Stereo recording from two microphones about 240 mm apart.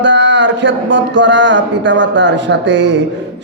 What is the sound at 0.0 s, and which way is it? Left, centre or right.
A man's voice, right.